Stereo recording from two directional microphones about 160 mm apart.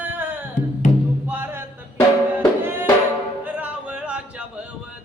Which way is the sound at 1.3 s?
15° right (ahead or behind).